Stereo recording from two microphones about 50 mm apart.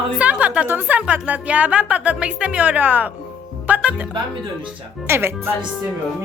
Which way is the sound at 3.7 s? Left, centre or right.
Right.